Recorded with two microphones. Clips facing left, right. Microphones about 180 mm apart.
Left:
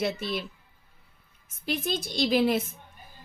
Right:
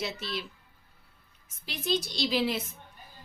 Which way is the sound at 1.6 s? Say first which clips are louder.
Left 1 dB; 50° left (ahead or behind).